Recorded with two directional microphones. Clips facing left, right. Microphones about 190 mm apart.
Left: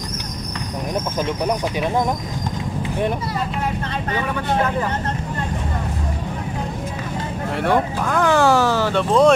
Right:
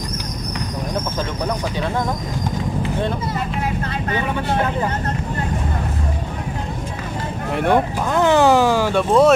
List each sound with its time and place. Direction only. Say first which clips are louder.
7.5 s speech: right 2 dB; 20° right (ahead or behind)